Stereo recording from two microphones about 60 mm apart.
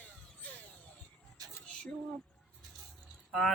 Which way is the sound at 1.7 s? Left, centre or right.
Centre.